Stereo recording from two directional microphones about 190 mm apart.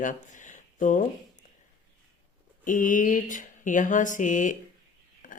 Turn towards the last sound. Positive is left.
turn(degrees=45)  # may be behind; listen again after turning